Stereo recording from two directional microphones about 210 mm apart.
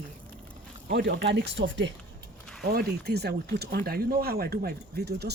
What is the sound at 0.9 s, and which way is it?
Speech, 55° right (ahead or behind).